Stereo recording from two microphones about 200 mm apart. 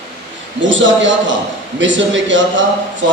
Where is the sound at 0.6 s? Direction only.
70° right (ahead or behind).